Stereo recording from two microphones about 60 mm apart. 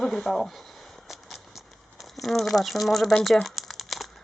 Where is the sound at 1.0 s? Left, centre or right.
Centre.